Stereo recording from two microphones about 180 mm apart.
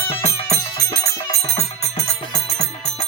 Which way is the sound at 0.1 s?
35° left (ahead or behind).